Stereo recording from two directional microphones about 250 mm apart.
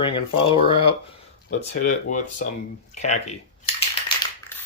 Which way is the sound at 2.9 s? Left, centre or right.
Left.